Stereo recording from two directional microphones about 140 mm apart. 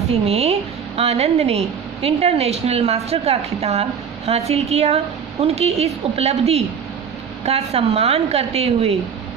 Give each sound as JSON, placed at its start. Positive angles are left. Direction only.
{"t": 0.1, "sound": "a woman's voice", "side_deg": -50}